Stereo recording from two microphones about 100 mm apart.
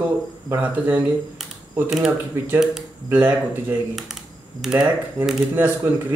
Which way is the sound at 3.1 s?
20° right (ahead or behind).